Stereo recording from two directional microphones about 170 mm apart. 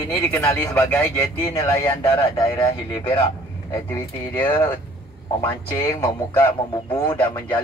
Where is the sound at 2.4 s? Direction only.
25° left (ahead or behind).